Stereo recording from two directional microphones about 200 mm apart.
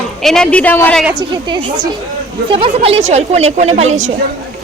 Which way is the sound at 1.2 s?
25° right (ahead or behind).